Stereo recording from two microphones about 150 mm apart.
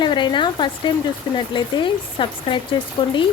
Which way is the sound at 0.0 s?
30° left (ahead or behind).